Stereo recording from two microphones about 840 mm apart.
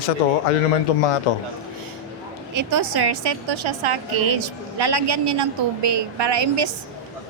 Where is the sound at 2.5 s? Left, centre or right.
Right.